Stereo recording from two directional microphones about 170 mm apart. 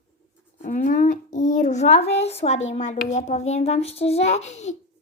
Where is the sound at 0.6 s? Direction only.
50° left (ahead or behind).